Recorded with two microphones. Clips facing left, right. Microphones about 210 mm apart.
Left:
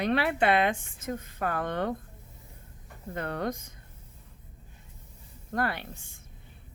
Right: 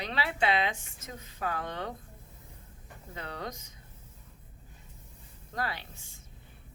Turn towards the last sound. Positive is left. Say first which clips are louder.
# left 5 dB
turn(degrees=55)  # may be behind; listen again after turning